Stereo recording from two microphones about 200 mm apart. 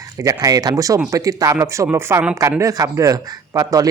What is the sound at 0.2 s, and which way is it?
Speech, 15° right (ahead or behind).